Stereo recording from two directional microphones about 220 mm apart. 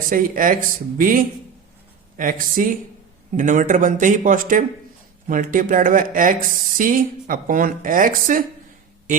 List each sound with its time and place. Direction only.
0.1 s a woman's voice: 40° right (ahead or behind)